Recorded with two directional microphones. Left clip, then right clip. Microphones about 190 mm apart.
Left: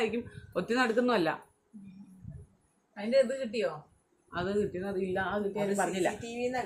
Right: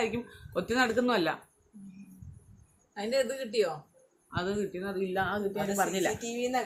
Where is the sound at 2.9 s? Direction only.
55° right (ahead or behind).